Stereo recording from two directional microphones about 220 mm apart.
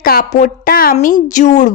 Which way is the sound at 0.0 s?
40° left (ahead or behind).